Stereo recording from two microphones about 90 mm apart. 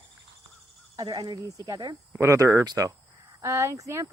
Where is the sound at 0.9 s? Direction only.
50° right (ahead or behind).